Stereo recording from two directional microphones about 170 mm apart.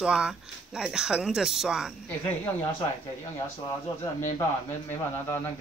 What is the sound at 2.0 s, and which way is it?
Speech, 10° left (ahead or behind).